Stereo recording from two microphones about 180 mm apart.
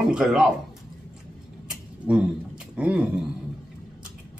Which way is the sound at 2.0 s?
5° right (ahead or behind).